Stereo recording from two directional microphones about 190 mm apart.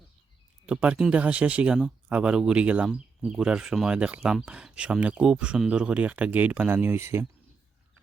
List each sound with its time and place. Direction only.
0.6 s speech: 5° right (ahead or behind)